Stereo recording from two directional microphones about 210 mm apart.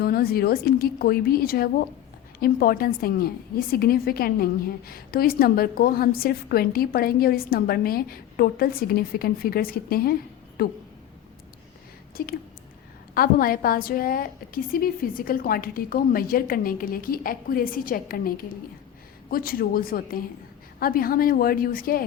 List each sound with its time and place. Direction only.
0.0 s a woman's voice: 45° left (ahead or behind)
12.2 s a woman's voice: 45° left (ahead or behind)